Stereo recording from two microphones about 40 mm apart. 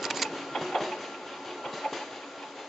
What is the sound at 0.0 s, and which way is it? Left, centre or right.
Printer, centre.